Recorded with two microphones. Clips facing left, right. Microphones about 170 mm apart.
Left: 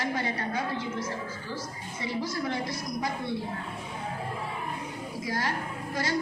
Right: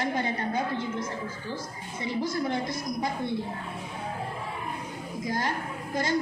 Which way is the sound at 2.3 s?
25° right (ahead or behind).